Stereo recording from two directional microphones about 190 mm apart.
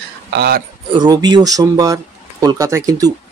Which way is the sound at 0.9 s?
20° right (ahead or behind).